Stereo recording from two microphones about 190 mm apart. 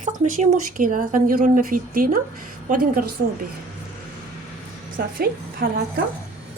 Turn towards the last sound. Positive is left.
turn(degrees=-50)  # may be behind; listen again after turning